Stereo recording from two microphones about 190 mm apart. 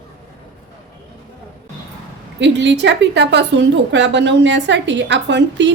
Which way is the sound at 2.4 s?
70° right (ahead or behind).